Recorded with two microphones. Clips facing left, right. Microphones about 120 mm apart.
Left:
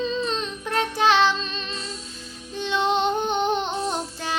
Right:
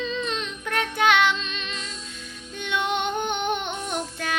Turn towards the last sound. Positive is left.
turn(degrees=30)  # may be behind; listen again after turning